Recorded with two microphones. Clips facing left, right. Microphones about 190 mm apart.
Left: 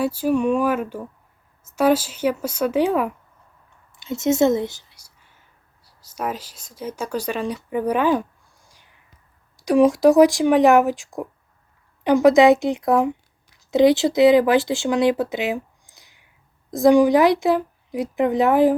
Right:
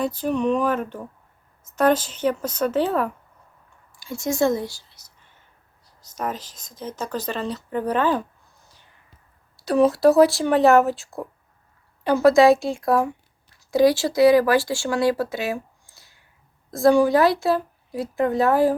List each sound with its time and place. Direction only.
0.0 s speech: 10° left (ahead or behind)
9.6 s speech: 15° left (ahead or behind)